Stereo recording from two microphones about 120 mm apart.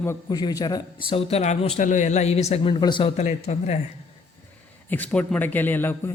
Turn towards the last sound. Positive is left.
turn(degrees=15)  # may be behind; listen again after turning